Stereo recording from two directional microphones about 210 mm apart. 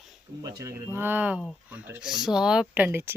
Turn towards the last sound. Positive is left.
turn(degrees=-10)  # may be behind; listen again after turning